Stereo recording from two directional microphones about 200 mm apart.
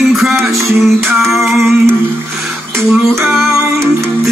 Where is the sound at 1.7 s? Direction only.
5° right (ahead or behind).